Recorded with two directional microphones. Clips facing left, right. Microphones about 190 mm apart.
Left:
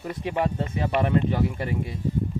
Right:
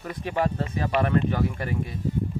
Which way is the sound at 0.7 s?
20° left (ahead or behind).